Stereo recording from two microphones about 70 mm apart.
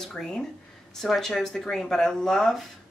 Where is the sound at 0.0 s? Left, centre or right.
Centre.